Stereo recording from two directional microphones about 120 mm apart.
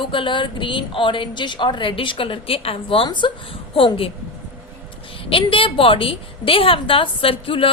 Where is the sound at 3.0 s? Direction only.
40° left (ahead or behind).